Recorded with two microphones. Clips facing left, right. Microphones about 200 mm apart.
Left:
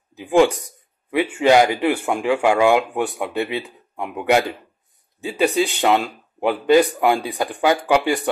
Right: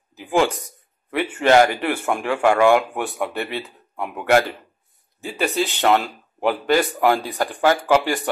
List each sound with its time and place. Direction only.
0.2 s speech: 15° left (ahead or behind)